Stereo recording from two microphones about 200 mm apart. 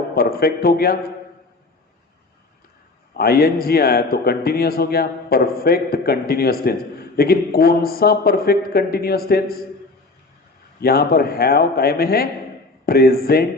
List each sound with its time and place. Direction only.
0.2 s a man's voice: 50° left (ahead or behind)
3.2 s a man's voice: 50° left (ahead or behind)
10.8 s a man's voice: 50° left (ahead or behind)